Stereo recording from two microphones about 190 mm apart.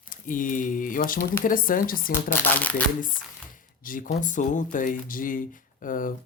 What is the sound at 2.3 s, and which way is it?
Speech, 10° left (ahead or behind).